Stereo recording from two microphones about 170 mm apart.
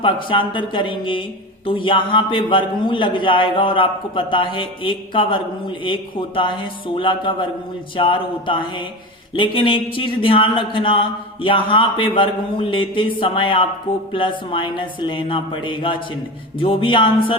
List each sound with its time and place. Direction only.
0.0 s a man's voice: 30° left (ahead or behind)